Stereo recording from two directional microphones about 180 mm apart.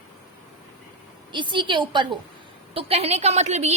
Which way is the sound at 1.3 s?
25° right (ahead or behind).